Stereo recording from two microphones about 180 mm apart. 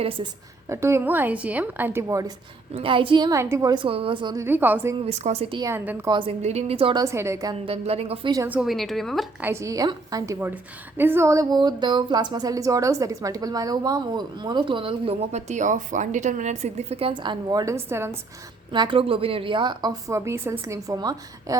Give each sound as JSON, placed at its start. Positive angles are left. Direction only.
{"t": 0.7, "sound": "a woman's voice", "side_deg": -15}
{"t": 2.7, "sound": "a woman's voice", "side_deg": -30}
{"t": 4.4, "sound": "a woman's voice", "side_deg": -10}
{"t": 5.0, "sound": "a woman's voice", "side_deg": -40}
{"t": 5.6, "sound": "a woman's voice", "side_deg": -10}
{"t": 6.1, "sound": "a woman's voice", "side_deg": -30}
{"t": 7.0, "sound": "a woman's voice", "side_deg": -15}
{"t": 7.6, "sound": "a woman's voice", "side_deg": -35}
{"t": 8.4, "sound": "a woman's voice", "side_deg": -5}
{"t": 9.4, "sound": "a woman's voice", "side_deg": -15}
{"t": 18.7, "sound": "a woman's voice", "side_deg": -25}